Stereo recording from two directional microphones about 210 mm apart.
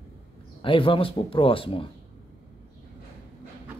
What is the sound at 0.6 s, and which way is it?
Speech, 25° left (ahead or behind).